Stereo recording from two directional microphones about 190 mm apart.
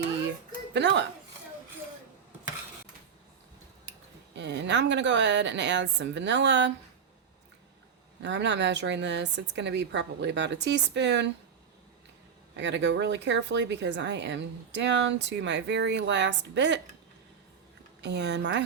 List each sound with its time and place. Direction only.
0.7 s speech: 65° right (ahead or behind)
4.4 s speech: 70° right (ahead or behind)
8.2 s speech: 70° right (ahead or behind)
12.5 s speech: 70° right (ahead or behind)
18.0 s speech: 65° right (ahead or behind)